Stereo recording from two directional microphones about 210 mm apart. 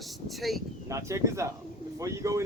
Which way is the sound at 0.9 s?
15° right (ahead or behind).